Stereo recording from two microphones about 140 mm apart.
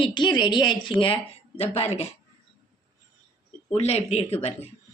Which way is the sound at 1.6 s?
50° left (ahead or behind).